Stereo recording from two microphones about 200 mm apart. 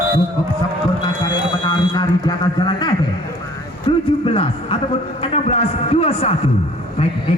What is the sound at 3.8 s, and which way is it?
A man's voice, 25° left (ahead or behind).